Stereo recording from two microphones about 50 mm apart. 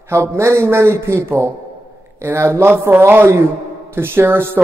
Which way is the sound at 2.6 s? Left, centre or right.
Right.